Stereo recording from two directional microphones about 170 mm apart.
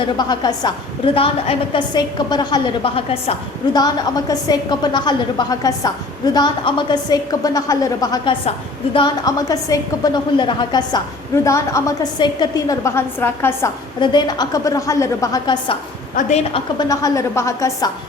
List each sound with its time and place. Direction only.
0.2 s a woman's voice: 25° left (ahead or behind)
14.0 s a woman's voice: 25° left (ahead or behind)